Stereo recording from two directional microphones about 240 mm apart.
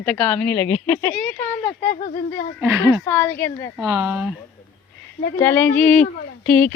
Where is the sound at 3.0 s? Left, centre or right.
Centre.